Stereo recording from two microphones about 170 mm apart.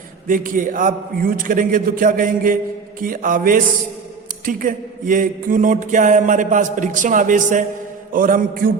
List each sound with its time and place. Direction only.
0.3 s mantra: 55° right (ahead or behind)
3.0 s music: 55° right (ahead or behind)
4.4 s mantra: 50° right (ahead or behind)